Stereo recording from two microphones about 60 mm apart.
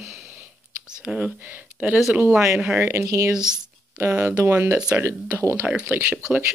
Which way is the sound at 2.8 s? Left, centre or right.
Right.